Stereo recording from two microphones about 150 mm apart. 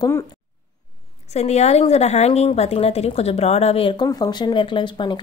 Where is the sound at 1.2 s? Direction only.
45° left (ahead or behind).